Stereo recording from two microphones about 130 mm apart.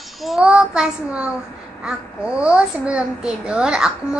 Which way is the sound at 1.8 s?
10° right (ahead or behind).